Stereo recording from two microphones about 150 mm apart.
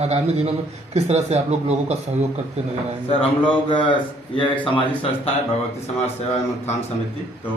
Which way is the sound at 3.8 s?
35° left (ahead or behind).